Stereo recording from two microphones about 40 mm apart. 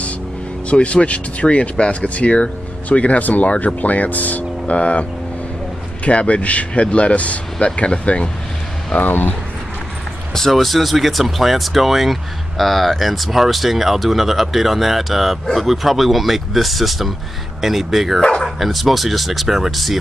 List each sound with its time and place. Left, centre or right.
0.7 s speech: left
6.0 s speech: left
8.9 s speech: left
10.3 s speech: centre
18.2 s speech: centre
18.6 s speech: centre